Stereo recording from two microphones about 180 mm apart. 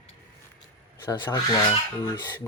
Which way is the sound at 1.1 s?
20° left (ahead or behind).